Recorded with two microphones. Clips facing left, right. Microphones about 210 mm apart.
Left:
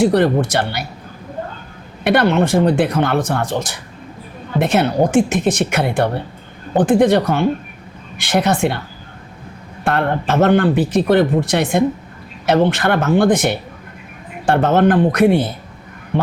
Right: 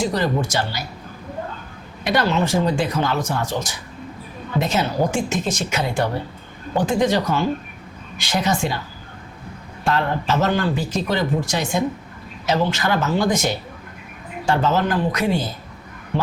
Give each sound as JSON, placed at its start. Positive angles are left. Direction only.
{"t": 0.0, "sound": "speech", "side_deg": 60}
{"t": 2.0, "sound": "speech", "side_deg": 60}
{"t": 9.8, "sound": "speech", "side_deg": 55}